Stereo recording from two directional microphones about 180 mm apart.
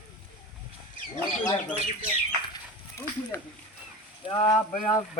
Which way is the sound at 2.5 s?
15° left (ahead or behind).